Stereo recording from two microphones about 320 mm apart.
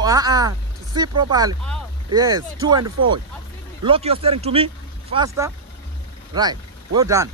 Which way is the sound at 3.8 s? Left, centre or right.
Centre.